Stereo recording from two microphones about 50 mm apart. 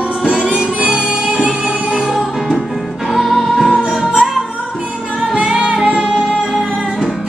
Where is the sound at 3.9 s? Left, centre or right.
Right.